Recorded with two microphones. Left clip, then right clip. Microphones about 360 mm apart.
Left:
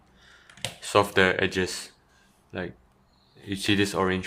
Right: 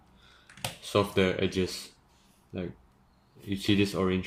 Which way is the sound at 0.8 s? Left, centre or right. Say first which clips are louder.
Left 6 dB; centre.